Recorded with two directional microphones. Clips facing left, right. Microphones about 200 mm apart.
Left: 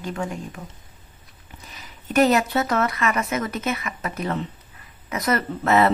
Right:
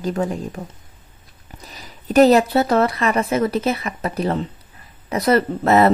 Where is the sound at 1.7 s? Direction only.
35° right (ahead or behind).